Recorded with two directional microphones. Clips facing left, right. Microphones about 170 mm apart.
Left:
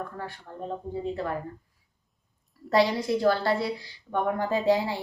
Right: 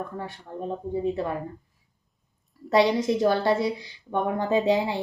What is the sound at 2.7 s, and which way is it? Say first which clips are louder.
A woman's voice: right 3 dB; 20° right (ahead or behind).